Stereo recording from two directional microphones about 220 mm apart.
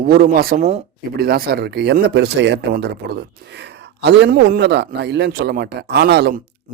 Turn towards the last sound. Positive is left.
turn(degrees=-45)  # may be behind; listen again after turning